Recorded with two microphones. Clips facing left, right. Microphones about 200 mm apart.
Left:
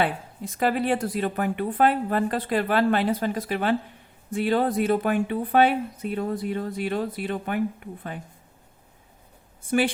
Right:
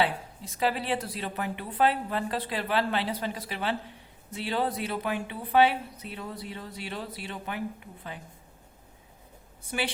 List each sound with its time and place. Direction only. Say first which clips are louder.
0.0 s speech: left 2 dB; 50° left (ahead or behind)
9.6 s speech: left 10 dB; 50° left (ahead or behind)